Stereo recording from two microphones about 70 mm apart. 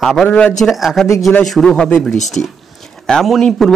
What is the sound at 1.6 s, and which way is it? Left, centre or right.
Speech, centre.